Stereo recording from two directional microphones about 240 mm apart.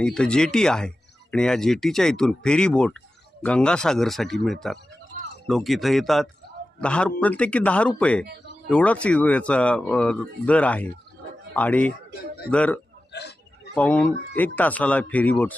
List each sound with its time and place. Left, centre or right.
0.0 s speech: centre
13.1 s speech: left
13.7 s speech: centre